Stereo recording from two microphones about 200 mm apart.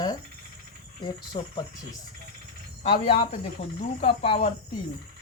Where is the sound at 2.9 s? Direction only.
30° left (ahead or behind).